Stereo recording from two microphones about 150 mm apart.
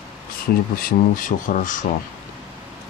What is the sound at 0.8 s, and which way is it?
Speech, 70° left (ahead or behind).